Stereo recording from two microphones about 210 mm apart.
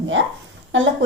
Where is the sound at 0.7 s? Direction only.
60° right (ahead or behind).